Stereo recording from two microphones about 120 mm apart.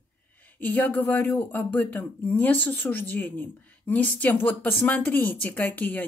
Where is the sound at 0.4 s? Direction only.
15° left (ahead or behind).